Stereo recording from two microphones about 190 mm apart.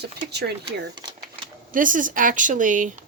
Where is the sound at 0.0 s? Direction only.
60° right (ahead or behind).